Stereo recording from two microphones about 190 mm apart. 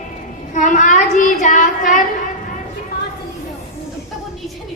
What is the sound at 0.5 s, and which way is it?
Child singing, 40° left (ahead or behind).